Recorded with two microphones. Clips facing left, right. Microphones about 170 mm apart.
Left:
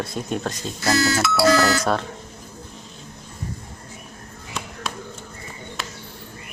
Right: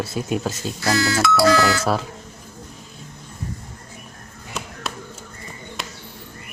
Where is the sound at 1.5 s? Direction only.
40° left (ahead or behind).